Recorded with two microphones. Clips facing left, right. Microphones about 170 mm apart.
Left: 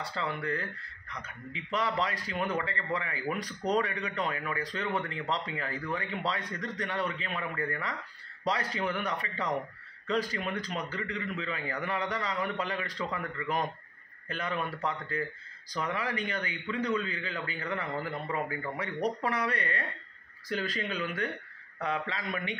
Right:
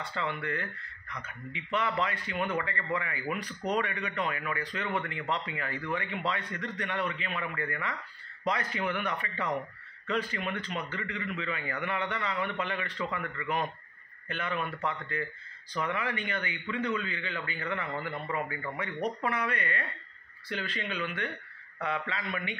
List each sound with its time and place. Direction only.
0.0 s a man's voice: 35° left (ahead or behind)